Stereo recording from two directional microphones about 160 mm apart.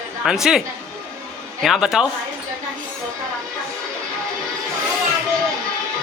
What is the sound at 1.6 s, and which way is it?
Speech, 5° right (ahead or behind).